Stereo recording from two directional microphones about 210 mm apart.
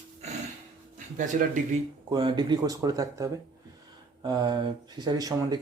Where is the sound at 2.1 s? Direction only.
20° right (ahead or behind).